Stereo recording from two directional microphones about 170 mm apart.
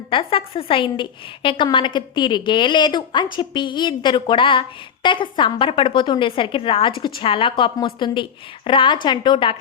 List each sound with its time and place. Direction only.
0.1 s a woman's voice: 30° left (ahead or behind)